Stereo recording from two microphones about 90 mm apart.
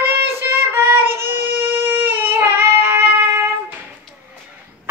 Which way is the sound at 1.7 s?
25° right (ahead or behind).